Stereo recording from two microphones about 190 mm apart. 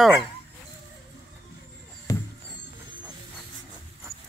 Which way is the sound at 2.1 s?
15° left (ahead or behind).